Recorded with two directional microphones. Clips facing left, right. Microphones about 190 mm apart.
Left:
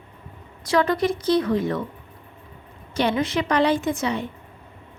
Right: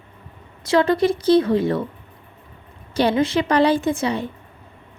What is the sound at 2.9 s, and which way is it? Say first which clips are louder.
Speech: right 4 dB; 35° right (ahead or behind).